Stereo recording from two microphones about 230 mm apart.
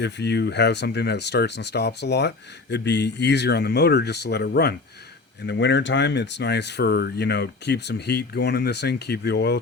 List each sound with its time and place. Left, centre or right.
0.0 s speech: left